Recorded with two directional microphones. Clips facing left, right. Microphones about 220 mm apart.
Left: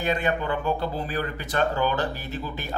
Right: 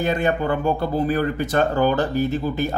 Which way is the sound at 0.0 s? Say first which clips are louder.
Right 5 dB; 45° right (ahead or behind).